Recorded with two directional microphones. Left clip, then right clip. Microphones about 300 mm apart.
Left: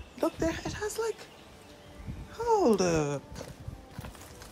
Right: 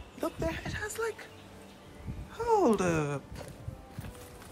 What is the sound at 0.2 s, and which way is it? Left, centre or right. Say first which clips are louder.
Music: left 4 dB; left.